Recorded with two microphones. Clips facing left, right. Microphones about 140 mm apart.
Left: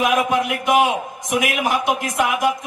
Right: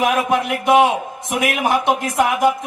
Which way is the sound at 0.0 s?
30° right (ahead or behind).